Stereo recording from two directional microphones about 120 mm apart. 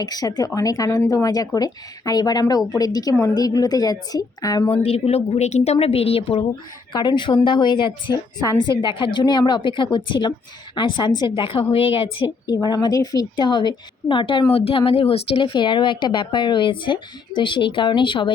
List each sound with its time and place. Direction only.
0.0 s speech: 35° left (ahead or behind)
4.7 s a woman's voice: 55° left (ahead or behind)
6.9 s speech: 40° left (ahead or behind)
12.5 s speech: 35° left (ahead or behind)